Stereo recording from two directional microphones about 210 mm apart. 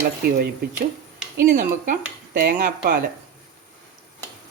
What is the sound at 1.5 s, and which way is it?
Speech, 40° right (ahead or behind).